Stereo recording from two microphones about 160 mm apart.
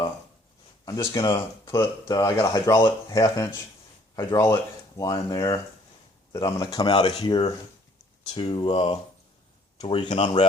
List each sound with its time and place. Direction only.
0.9 s speech: 25° left (ahead or behind)